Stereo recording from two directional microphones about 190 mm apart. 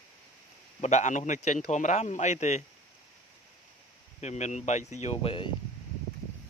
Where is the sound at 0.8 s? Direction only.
40° left (ahead or behind).